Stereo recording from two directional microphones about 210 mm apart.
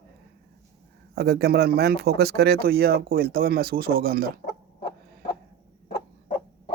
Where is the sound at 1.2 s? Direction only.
50° right (ahead or behind).